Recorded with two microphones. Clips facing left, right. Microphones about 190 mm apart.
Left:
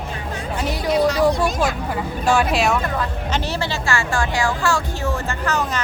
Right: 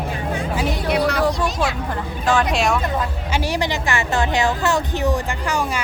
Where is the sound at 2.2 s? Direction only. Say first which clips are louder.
Even; 10° left (ahead or behind).